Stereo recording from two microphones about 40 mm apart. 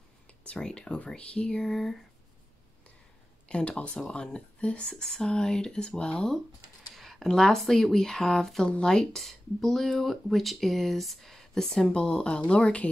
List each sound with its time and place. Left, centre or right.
0.4 s speech: left
1.7 s speech: centre
3.4 s speech: left
7.0 s a sound: centre
7.2 s speech: centre
11.5 s speech: centre; by 12.9 s left